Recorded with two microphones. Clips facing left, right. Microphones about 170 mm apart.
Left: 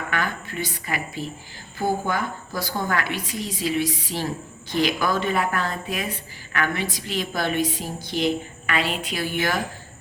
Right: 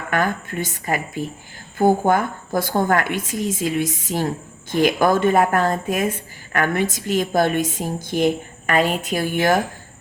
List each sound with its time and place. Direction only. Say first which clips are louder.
0.1 s speech: right 9 dB; 45° right (ahead or behind)